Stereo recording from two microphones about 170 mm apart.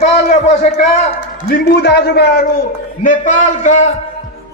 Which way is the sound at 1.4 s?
70° left (ahead or behind).